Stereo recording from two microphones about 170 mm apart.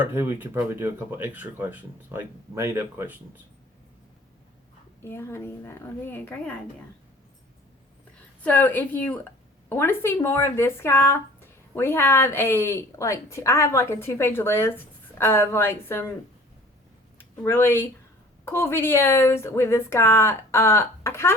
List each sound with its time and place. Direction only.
0.0 s speech: 15° right (ahead or behind)
5.0 s speech: 15° left (ahead or behind)
8.4 s speech: 10° left (ahead or behind)
17.2 s speech: 15° left (ahead or behind)